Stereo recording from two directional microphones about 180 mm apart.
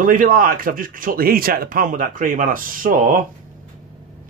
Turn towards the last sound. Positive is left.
turn(degrees=-50)  # may be behind; listen again after turning